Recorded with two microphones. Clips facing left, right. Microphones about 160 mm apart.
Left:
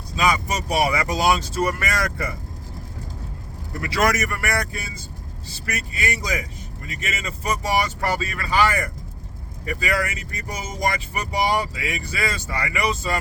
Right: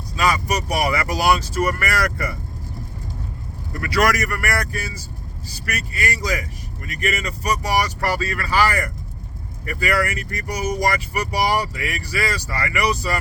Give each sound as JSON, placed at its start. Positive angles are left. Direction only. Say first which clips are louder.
{"t": 0.2, "sound": "speech", "louder": "right 1 dB", "side_deg": 20}
{"t": 3.8, "sound": "speech", "louder": "right 2 dB", "side_deg": 25}
{"t": 7.4, "sound": "speech", "louder": "right 1 dB", "side_deg": 25}